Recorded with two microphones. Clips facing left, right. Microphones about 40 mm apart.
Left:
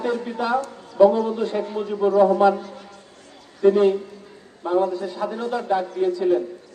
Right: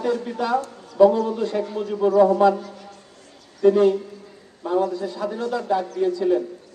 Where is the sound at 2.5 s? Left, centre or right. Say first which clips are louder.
Left 1 dB; left.